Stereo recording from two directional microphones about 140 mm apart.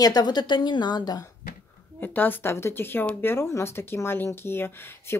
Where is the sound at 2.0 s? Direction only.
15° left (ahead or behind).